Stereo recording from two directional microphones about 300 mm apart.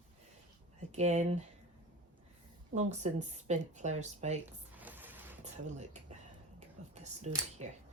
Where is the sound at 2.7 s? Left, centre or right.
Right.